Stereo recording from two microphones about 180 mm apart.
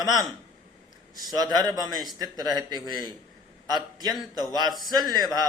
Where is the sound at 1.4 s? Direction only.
20° right (ahead or behind).